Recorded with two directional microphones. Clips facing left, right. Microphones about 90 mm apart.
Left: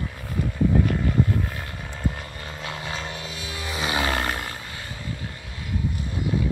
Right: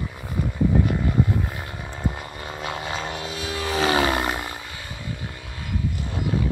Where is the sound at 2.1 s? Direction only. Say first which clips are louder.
Right 3 dB; 20° right (ahead or behind); by 4.0 s 40° right (ahead or behind).